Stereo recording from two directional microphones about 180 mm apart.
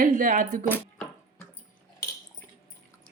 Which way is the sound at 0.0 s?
45° right (ahead or behind).